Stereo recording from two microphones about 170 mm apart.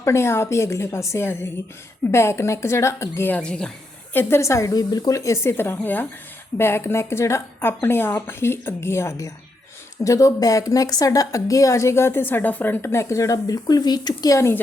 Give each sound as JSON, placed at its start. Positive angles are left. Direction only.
{"t": 0.0, "sound": "a woman's voice", "side_deg": 15}